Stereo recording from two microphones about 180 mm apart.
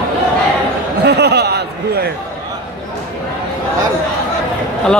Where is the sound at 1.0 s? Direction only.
65° right (ahead or behind).